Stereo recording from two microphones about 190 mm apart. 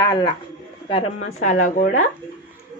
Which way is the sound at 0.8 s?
35° left (ahead or behind).